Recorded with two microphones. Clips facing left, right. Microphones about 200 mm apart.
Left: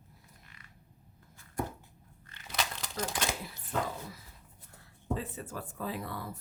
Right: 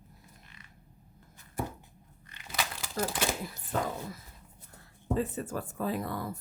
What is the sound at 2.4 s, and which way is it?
Crumpling, 5° right (ahead or behind).